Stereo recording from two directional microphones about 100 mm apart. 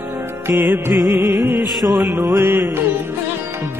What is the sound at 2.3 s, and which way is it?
Music, 25° right (ahead or behind).